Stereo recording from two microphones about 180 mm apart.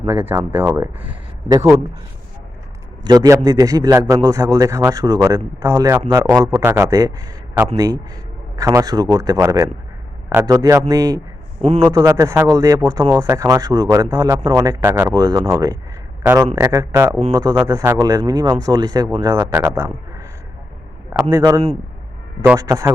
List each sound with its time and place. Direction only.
0.1 s speech: 10° right (ahead or behind)
3.0 s a man's voice: 20° right (ahead or behind)